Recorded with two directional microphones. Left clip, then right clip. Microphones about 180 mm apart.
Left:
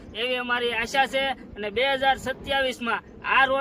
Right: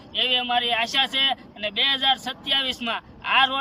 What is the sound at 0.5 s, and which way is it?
Speech, 20° left (ahead or behind).